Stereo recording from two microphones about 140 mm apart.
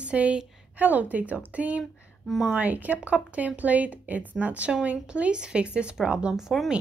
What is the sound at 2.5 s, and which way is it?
Speech, 10° right (ahead or behind).